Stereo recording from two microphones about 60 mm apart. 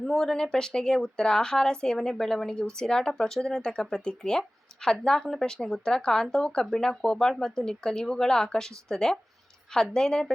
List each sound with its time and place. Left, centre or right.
0.0 s a woman's voice: centre